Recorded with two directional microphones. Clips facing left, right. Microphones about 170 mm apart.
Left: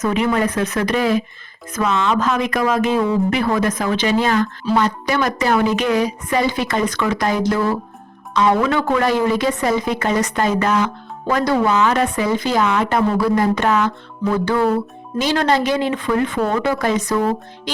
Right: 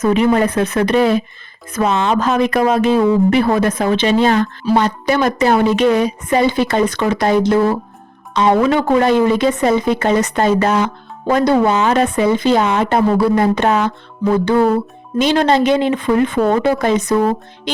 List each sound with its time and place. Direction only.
0.0 s a woman's voice: 30° right (ahead or behind)
15.2 s a woman's voice: 20° right (ahead or behind)